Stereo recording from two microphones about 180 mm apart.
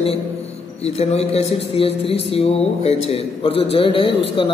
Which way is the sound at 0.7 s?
35° left (ahead or behind).